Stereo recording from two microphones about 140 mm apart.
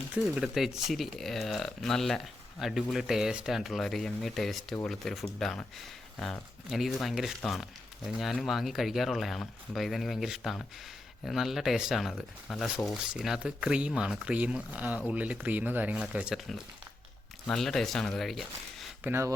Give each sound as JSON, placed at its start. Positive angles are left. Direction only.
{"t": 0.1, "sound": "speech", "side_deg": -5}
{"t": 19.0, "sound": "speech", "side_deg": -15}